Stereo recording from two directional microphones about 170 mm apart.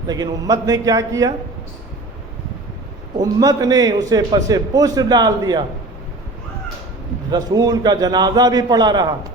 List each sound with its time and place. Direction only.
0.1 s a man's voice: 25° right (ahead or behind)
3.2 s a man's voice: 20° right (ahead or behind)
7.3 s a man's voice: 20° right (ahead or behind)